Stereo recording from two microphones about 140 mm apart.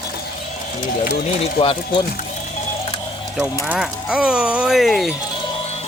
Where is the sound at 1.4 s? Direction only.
40° left (ahead or behind).